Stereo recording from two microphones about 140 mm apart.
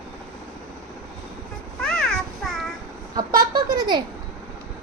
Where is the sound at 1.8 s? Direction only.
5° left (ahead or behind).